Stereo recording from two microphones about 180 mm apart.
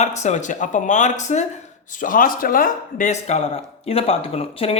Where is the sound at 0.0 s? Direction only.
40° left (ahead or behind).